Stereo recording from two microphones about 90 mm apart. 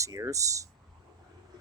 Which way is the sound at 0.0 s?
35° right (ahead or behind).